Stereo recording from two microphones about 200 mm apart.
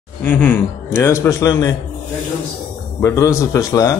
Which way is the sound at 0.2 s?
10° left (ahead or behind).